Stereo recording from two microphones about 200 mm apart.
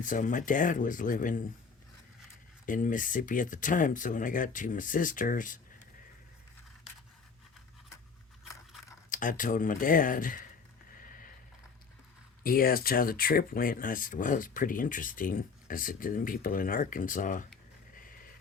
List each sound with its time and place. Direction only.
0.0 s speech: 40° left (ahead or behind)
2.6 s speech: 40° left (ahead or behind)
9.0 s speech: 40° left (ahead or behind)
11.0 s a sound: 45° left (ahead or behind)
12.4 s speech: 45° left (ahead or behind)
17.9 s a sound: 45° left (ahead or behind)